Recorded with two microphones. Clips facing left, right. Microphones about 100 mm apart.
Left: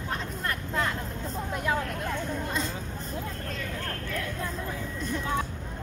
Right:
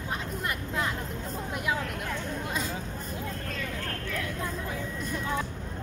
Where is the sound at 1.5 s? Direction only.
10° right (ahead or behind).